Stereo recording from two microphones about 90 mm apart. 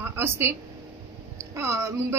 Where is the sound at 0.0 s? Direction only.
25° right (ahead or behind).